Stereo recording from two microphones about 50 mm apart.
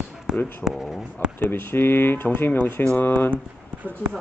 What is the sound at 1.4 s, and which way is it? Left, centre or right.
Speech, left.